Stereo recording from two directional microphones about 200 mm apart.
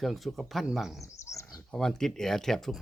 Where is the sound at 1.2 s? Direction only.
15° left (ahead or behind).